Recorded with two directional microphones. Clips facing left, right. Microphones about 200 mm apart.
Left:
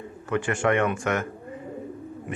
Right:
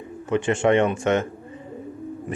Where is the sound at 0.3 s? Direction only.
20° right (ahead or behind).